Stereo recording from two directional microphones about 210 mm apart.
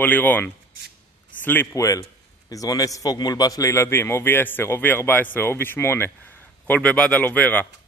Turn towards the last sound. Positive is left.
turn(degrees=5)  # may be behind; listen again after turning